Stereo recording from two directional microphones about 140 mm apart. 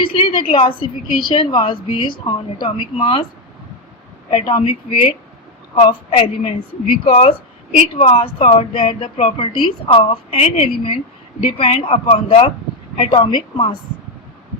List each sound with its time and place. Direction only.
0.0 s a woman's voice: 40° left (ahead or behind)
4.3 s a woman's voice: 35° left (ahead or behind)